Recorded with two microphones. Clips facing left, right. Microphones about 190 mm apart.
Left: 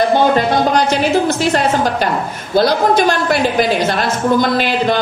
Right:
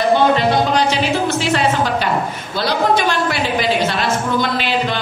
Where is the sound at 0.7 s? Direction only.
45° left (ahead or behind).